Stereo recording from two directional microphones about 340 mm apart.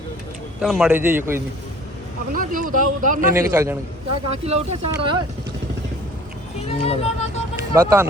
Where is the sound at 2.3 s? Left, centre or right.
Right.